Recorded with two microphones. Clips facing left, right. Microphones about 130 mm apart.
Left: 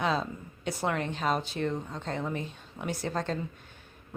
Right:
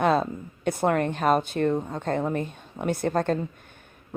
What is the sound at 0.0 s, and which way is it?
A woman's voice, 55° right (ahead or behind).